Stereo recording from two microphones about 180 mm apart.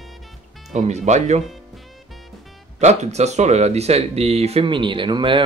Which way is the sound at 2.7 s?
40° right (ahead or behind).